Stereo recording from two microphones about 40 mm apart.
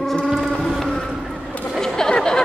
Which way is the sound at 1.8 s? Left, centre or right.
Centre.